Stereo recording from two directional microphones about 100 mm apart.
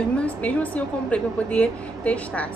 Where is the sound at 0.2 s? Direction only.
15° left (ahead or behind).